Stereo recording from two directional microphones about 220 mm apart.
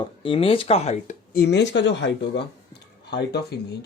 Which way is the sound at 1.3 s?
50° left (ahead or behind).